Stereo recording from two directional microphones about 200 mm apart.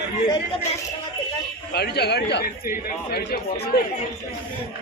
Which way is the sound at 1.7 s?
55° left (ahead or behind).